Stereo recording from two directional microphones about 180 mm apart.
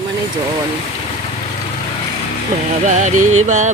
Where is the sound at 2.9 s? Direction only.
45° right (ahead or behind).